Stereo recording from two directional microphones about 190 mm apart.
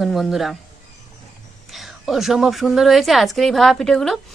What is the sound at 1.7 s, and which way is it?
A woman's voice, centre (ahead or behind).